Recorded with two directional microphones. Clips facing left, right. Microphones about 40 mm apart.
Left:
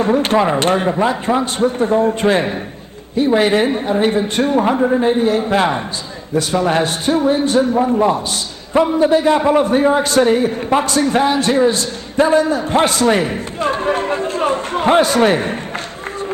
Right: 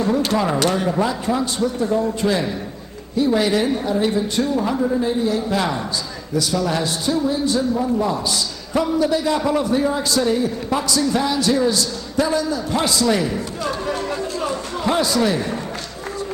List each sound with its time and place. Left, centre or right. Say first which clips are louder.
0.0 s a man's voice: left 5 dB; left